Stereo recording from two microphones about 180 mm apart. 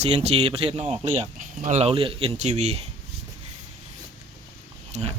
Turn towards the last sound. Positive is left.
turn(degrees=-40)  # may be behind; listen again after turning